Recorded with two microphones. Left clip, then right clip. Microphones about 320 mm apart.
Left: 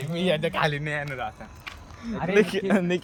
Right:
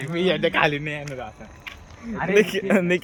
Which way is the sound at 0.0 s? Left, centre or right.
Left.